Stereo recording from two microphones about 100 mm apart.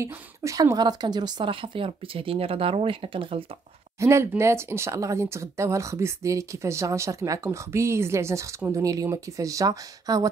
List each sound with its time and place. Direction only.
0.0 s speech: 30° right (ahead or behind); by 1.5 s 50° right (ahead or behind)
1.5 s speech: 60° right (ahead or behind)
4.0 s speech: 30° right (ahead or behind)